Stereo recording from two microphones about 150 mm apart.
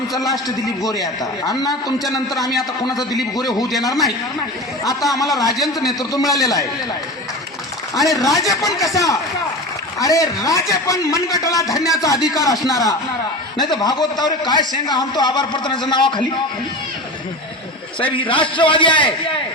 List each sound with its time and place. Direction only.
0.2 s a man's voice: 25° left (ahead or behind)
5.5 s a man's voice: centre (ahead or behind)
6.0 s a man's voice: 25° left (ahead or behind)
7.9 s a man's voice: 25° left (ahead or behind)
18.0 s a man's voice: 35° left (ahead or behind)